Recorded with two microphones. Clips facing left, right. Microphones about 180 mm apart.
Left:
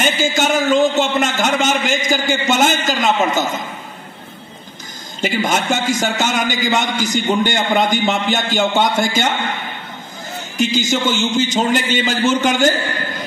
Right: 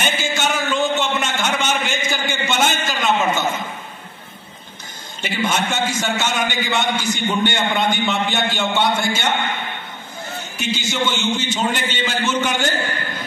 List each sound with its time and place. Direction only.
0.0 s a man's voice: 40° left (ahead or behind)
5.2 s a man's voice: 40° left (ahead or behind)
10.6 s a man's voice: 40° left (ahead or behind)